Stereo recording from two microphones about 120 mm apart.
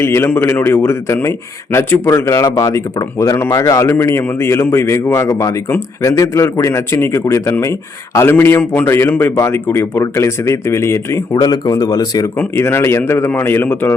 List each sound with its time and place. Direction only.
0.0 s speech: 20° left (ahead or behind)